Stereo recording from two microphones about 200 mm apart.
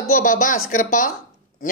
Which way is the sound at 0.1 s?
45° left (ahead or behind).